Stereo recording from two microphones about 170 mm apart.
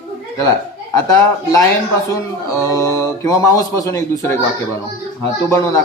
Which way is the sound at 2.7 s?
20° left (ahead or behind).